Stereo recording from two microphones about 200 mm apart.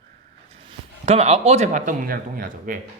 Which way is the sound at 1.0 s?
30° right (ahead or behind).